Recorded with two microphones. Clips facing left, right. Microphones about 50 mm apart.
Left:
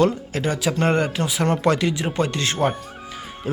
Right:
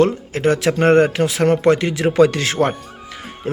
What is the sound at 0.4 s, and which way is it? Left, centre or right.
Speech, right.